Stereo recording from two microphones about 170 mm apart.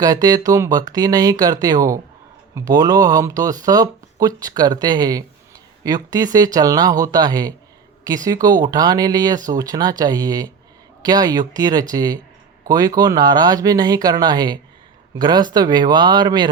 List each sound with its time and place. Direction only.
0.0 s speech: 20° right (ahead or behind)